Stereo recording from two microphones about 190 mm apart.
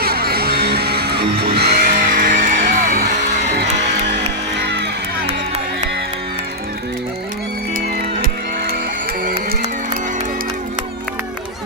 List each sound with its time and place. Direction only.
0.0 s music: 55° right (ahead or behind)
4.6 s music: 60° right (ahead or behind)